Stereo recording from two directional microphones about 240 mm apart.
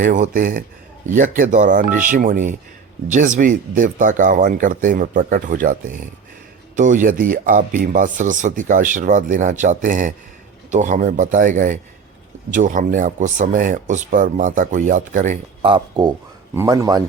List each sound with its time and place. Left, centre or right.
0.0 s a man's voice: right; by 17.0 s centre